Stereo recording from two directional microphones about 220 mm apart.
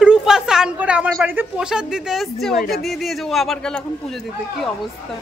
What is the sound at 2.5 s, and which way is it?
Speech, 45° left (ahead or behind).